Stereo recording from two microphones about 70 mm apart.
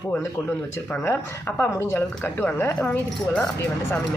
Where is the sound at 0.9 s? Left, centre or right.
Left.